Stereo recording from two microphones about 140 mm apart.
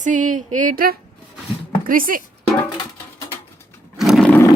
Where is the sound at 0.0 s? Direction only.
65° right (ahead or behind).